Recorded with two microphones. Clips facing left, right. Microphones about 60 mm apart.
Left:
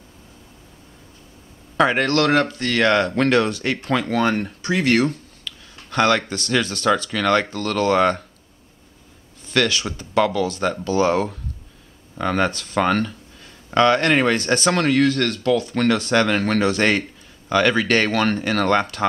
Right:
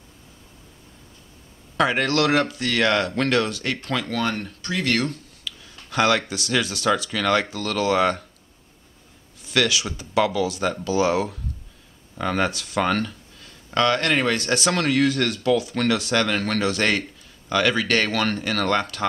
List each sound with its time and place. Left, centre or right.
1.8 s speech: centre
4.2 s speech: left
5.5 s a sound: centre
5.9 s speech: centre
9.5 s speech: centre